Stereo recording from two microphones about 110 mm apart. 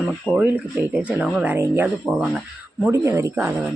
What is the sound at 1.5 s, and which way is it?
Speech, 20° right (ahead or behind).